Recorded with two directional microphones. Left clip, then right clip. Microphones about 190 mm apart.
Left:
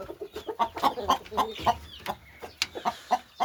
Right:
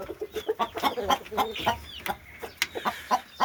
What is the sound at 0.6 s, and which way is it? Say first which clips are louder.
Chicken: left 3 dB; 25° left (ahead or behind).